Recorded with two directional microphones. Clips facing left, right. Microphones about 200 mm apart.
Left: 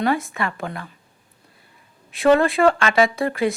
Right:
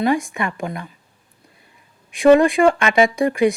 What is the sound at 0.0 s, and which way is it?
Speech, 15° right (ahead or behind).